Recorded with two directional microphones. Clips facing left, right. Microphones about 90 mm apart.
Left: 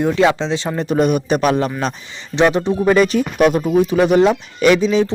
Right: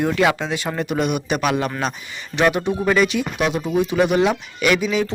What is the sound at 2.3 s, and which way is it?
Speech, 25° left (ahead or behind).